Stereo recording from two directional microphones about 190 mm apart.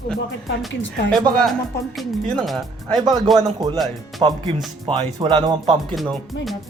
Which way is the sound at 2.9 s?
20° right (ahead or behind).